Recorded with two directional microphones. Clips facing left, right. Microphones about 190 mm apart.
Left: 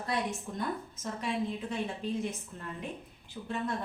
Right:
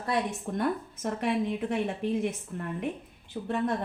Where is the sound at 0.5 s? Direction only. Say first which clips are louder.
Right 6 dB; 65° right (ahead or behind).